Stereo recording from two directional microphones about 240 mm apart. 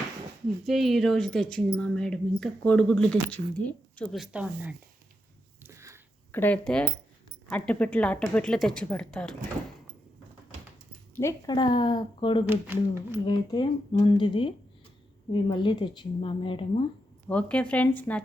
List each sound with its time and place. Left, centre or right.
0.6 s speech: centre
5.6 s a sound: centre
6.3 s speech: centre
11.1 s a woman's voice: centre
12.5 s speech: centre
13.2 s a woman's voice: centre
17.2 s speech: centre